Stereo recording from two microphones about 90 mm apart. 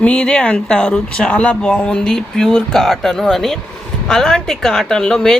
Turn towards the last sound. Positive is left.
turn(degrees=5)  # may be behind; listen again after turning